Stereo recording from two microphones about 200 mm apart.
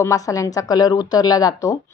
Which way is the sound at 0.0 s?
15° left (ahead or behind).